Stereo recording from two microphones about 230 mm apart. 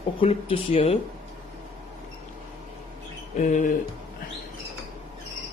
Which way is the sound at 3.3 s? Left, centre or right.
Left.